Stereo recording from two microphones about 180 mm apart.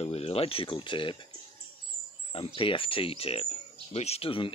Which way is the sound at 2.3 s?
30° left (ahead or behind).